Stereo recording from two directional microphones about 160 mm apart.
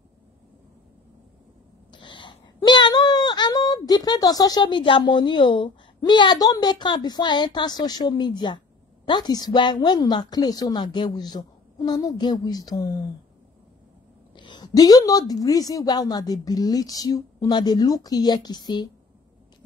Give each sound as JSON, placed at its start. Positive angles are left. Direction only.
{"t": 1.9, "sound": "a woman's voice", "side_deg": 30}
{"t": 14.3, "sound": "a woman's voice", "side_deg": 30}